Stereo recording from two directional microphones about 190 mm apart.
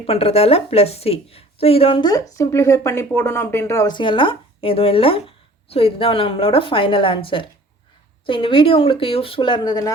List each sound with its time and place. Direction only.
0.0 s a woman's voice: 30° left (ahead or behind)